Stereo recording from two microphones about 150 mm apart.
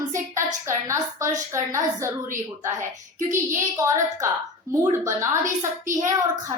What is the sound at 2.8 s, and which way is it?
Speech, 60° right (ahead or behind).